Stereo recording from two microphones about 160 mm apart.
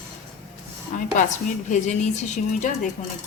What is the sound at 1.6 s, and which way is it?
A woman's voice, 50° left (ahead or behind).